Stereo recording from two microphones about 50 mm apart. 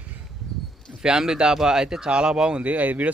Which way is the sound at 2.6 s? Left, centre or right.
Right.